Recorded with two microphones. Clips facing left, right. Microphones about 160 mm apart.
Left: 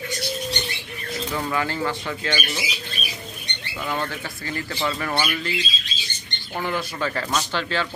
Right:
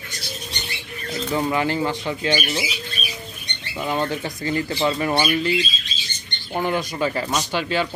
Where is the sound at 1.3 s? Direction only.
20° right (ahead or behind).